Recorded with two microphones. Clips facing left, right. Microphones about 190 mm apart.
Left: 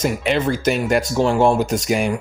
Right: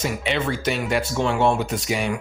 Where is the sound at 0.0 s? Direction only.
45° left (ahead or behind).